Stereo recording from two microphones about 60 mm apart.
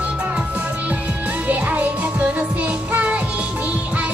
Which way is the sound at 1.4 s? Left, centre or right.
Right.